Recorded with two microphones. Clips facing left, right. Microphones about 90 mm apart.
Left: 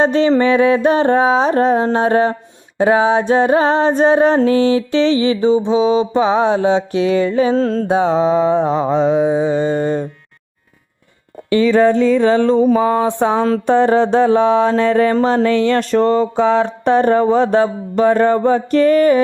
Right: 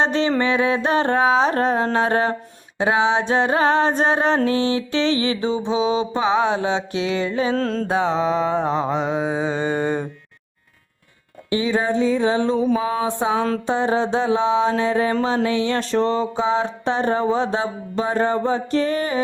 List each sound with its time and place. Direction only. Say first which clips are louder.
0.0 s mantra: left 6 dB; 40° left (ahead or behind)
4.5 s mantra: left 7 dB; 25° right (ahead or behind)
4.9 s mantra: left 6 dB; 35° left (ahead or behind)
7.5 s music: left 6 dB; 10° left (ahead or behind)
7.9 s mantra: left 6 dB; 30° left (ahead or behind)
9.1 s mantra: left 8 dB; 20° right (ahead or behind)
11.4 s mantra: left 9 dB; 70° left (ahead or behind)
15.1 s a sound: left 6 dB; 45° left (ahead or behind)